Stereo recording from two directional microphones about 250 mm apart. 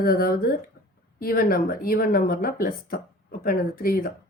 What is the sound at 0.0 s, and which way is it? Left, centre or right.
Speech, left.